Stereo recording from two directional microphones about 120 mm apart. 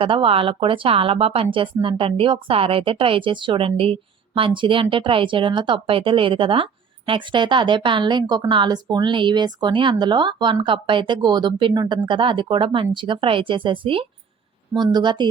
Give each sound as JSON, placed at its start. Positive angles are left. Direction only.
{"t": 0.0, "sound": "a woman's voice", "side_deg": -45}